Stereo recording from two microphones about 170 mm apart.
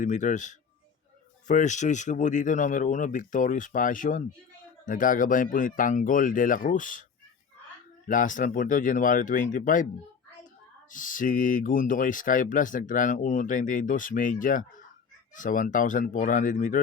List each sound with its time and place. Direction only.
0.0 s speech: 45° left (ahead or behind)
8.0 s speech: 50° left (ahead or behind)
10.9 s speech: 50° left (ahead or behind)